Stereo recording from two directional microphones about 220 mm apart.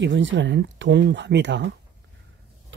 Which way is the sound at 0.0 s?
55° right (ahead or behind).